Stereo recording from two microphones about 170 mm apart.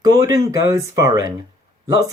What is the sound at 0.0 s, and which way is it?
Speech, 20° right (ahead or behind).